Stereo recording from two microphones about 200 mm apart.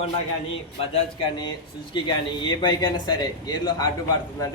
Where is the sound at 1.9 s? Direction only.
25° left (ahead or behind).